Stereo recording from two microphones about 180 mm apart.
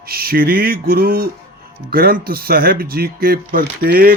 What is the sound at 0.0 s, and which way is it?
Speech, 55° right (ahead or behind).